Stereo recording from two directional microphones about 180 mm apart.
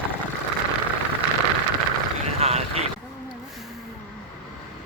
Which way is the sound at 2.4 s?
35° right (ahead or behind).